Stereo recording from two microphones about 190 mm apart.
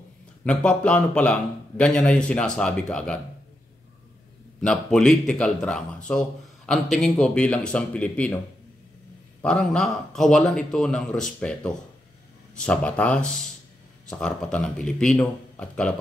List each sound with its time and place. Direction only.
0.5 s a man's voice: 5° left (ahead or behind)
4.6 s a man's voice: 5° left (ahead or behind)
9.4 s a man's voice: 5° left (ahead or behind)